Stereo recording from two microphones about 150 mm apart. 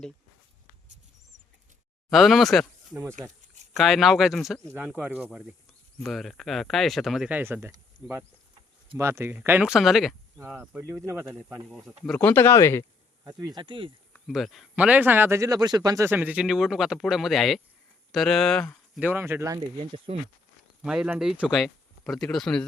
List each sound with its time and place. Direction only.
2.0 s speech: centre (ahead or behind)
2.9 s speech: 20° right (ahead or behind)
3.8 s speech: centre (ahead or behind)
6.0 s speech: centre (ahead or behind); by 7.8 s 15° right (ahead or behind)
9.0 s speech: 15° right (ahead or behind); by 10.4 s centre (ahead or behind)
10.4 s speech: 10° right (ahead or behind)
11.3 s speech: 5° right (ahead or behind); by 12.8 s 15° left (ahead or behind)
13.2 s speech: 30° right (ahead or behind)
14.3 s speech: centre (ahead or behind)
18.9 s speech: 10° right (ahead or behind)
19.8 s speech: 45° right (ahead or behind)
20.8 s speech: 5° right (ahead or behind)